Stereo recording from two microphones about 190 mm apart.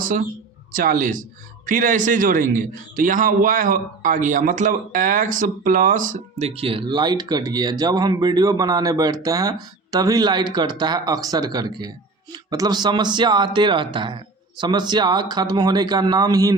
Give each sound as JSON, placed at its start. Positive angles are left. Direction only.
{"t": 0.0, "sound": "a man's voice", "side_deg": -45}